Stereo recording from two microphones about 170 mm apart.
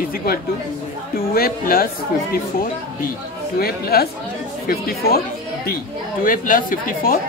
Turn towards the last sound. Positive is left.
turn(degrees=55)  # may be behind; listen again after turning